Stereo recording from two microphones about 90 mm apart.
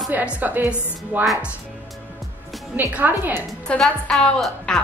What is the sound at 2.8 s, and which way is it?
Speech, 20° right (ahead or behind).